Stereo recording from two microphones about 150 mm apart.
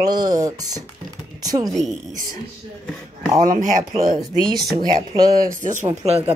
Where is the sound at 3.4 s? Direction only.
65° right (ahead or behind).